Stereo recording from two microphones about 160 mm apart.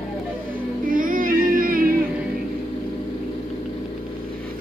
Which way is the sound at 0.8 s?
60° right (ahead or behind).